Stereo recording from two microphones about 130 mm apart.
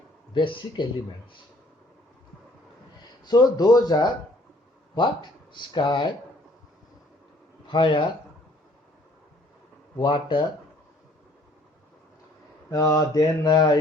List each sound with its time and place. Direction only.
0.3 s speech: 40° left (ahead or behind)
3.2 s speech: 30° left (ahead or behind)
7.7 s speech: 40° left (ahead or behind)
10.0 s speech: 40° left (ahead or behind)
12.7 s mantra: 30° left (ahead or behind)